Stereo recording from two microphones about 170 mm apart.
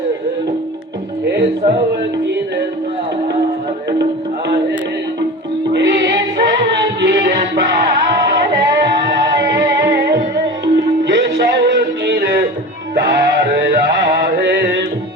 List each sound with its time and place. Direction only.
1.3 s speech: 80° right
5.7 s music: 90° right
11.0 s music: 90° right; by 13.7 s 70° right (ahead or behind)
14.3 s music: 85° right